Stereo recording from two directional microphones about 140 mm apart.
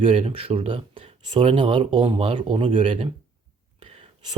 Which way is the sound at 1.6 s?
40° right (ahead or behind).